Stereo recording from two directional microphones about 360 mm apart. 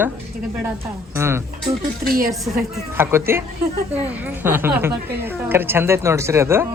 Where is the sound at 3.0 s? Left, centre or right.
Centre.